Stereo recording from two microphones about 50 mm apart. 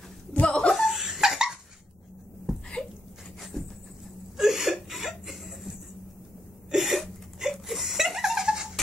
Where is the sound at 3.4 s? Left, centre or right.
Centre.